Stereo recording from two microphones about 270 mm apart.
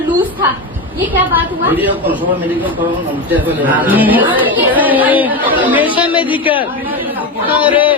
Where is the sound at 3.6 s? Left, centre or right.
Centre.